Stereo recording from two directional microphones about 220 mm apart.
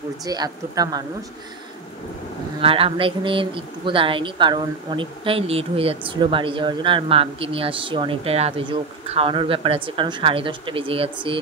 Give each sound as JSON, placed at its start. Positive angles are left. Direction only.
{"t": 0.2, "sound": "speech", "side_deg": -15}
{"t": 2.6, "sound": "speech", "side_deg": -25}